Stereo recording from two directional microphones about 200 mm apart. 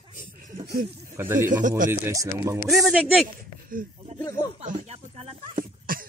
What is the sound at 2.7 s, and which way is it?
Speech, centre (ahead or behind).